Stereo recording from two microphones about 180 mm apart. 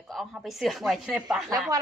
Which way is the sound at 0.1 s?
Centre (ahead or behind).